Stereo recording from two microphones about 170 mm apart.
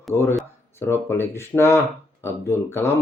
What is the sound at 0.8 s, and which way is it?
Speech, 15° left (ahead or behind).